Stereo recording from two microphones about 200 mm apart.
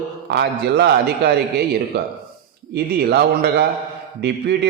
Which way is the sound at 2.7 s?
50° right (ahead or behind).